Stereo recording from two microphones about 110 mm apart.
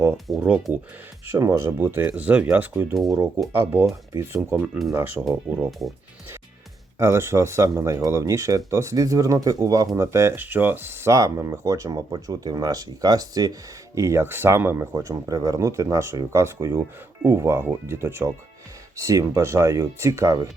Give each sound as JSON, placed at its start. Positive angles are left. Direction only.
{"t": 0.4, "sound": "speech", "side_deg": -10}
{"t": 1.3, "sound": "speech", "side_deg": -25}
{"t": 2.9, "sound": "speech", "side_deg": 0}
{"t": 3.2, "sound": "speech", "side_deg": -25}
{"t": 4.4, "sound": "speech", "side_deg": -15}
{"t": 7.0, "sound": "speech", "side_deg": -25}